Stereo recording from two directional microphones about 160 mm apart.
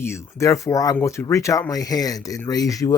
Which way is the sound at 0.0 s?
15° left (ahead or behind).